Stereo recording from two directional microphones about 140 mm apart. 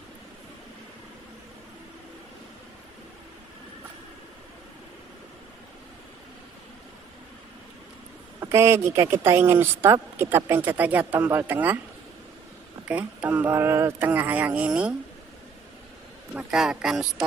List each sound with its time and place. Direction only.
8.4 s speech: 20° right (ahead or behind)
12.8 s speech: 10° right (ahead or behind)
16.3 s a man's voice: 5° right (ahead or behind)